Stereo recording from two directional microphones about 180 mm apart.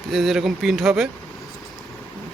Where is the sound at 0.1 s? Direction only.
Centre (ahead or behind).